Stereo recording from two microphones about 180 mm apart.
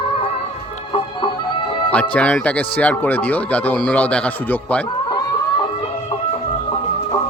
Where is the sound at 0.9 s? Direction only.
30° left (ahead or behind).